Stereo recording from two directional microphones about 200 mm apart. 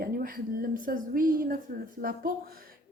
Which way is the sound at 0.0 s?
50° right (ahead or behind).